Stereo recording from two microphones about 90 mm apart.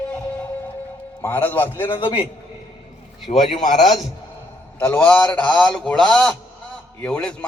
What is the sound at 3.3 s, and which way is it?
Speech, 90° left.